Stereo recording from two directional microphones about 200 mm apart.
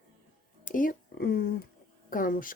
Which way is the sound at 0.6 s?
40° left (ahead or behind).